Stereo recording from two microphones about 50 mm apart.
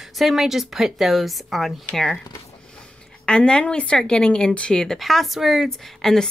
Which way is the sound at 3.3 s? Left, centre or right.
Centre.